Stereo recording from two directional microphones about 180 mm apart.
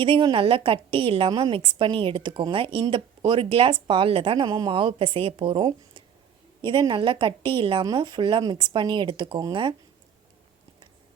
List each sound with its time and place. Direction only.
0.0 s a woman's voice: 30° right (ahead or behind)